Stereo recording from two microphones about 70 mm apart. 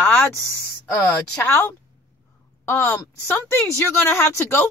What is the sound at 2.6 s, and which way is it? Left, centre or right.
A woman's voice, left.